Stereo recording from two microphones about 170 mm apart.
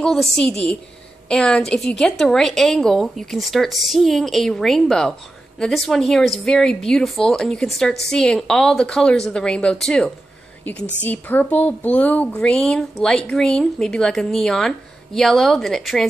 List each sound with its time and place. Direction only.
0.0 s speech: centre (ahead or behind)